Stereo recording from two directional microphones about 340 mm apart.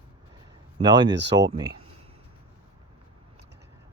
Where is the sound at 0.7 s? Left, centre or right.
Centre.